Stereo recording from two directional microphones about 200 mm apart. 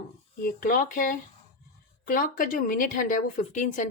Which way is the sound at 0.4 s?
45° left (ahead or behind).